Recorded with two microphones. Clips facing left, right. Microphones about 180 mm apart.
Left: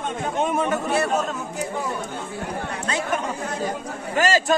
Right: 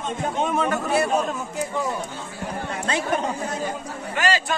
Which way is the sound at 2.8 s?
25° right (ahead or behind).